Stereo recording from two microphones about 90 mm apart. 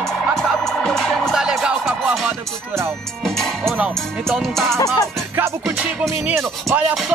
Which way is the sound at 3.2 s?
5° left (ahead or behind).